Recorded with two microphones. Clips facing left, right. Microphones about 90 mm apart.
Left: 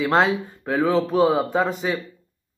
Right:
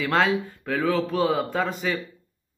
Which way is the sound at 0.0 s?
20° left (ahead or behind).